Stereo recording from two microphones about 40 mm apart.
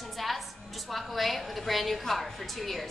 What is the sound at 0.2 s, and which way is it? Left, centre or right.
Music, centre.